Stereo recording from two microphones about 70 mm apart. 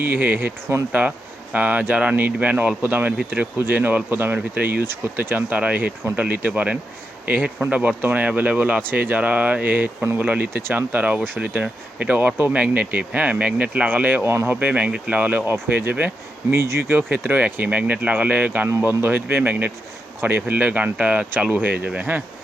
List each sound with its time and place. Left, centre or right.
0.0 s speech: right
1.5 s speech: right